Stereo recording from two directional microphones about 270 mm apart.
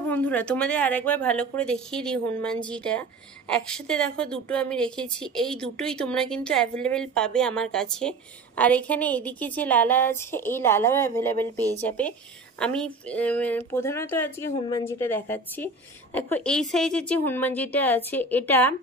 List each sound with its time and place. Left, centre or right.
0.0 s a woman's voice: centre
12.5 s a woman's voice: centre
14.9 s a woman's voice: centre